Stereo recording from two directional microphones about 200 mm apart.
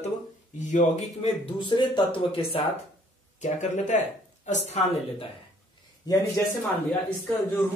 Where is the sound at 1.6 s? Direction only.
25° left (ahead or behind).